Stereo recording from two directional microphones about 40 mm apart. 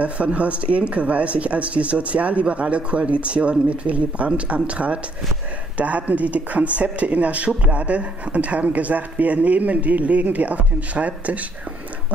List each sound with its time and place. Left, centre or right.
0.0 s speech: right